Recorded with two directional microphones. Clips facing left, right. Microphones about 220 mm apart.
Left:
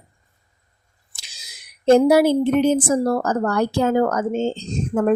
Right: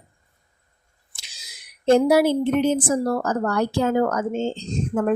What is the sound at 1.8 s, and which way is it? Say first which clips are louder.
A woman's voice: left 3 dB; 45° left (ahead or behind).